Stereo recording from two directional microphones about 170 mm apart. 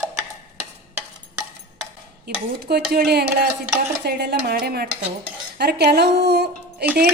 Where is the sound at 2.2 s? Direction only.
70° right (ahead or behind).